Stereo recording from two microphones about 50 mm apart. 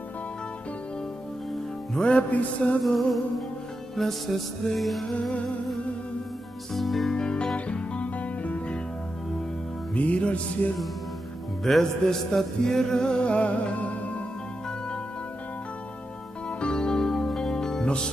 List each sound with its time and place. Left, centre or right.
2.0 s music: left
2.8 s music: centre
6.7 s music: centre
7.2 s music: centre
9.9 s music: left
11.6 s music: centre; by 14.2 s left
16.4 s music: centre